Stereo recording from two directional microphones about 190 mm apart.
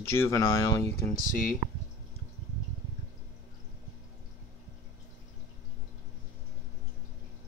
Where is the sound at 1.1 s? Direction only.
45° left (ahead or behind).